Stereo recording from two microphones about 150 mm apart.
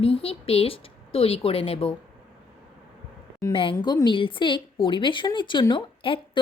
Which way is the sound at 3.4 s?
35° left (ahead or behind).